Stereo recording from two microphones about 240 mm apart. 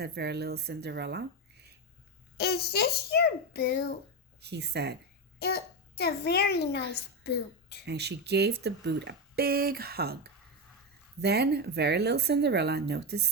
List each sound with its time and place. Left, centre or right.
0.0 s speech: right
2.4 s a child's voice: left
4.4 s speech: right
5.4 s a child's voice: left
7.9 s speech: right
11.2 s speech: right